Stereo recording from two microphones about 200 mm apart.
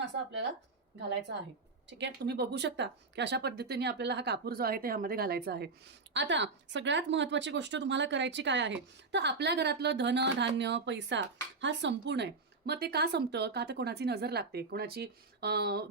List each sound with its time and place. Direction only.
1.9 s speech: 60° right (ahead or behind)